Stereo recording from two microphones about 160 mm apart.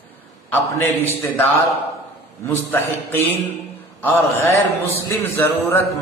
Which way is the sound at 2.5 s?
15° left (ahead or behind).